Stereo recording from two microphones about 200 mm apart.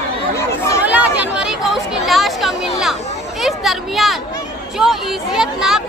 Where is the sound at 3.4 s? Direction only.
Centre (ahead or behind).